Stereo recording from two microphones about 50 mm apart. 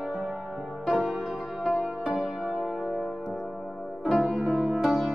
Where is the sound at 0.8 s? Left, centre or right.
Right.